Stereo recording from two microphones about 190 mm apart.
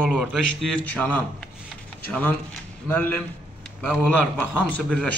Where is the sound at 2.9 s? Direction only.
10° left (ahead or behind).